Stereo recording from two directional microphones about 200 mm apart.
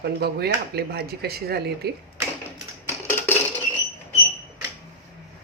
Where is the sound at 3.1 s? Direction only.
10° left (ahead or behind).